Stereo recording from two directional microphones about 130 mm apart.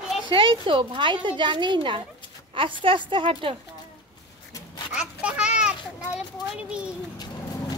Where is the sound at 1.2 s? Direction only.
40° right (ahead or behind).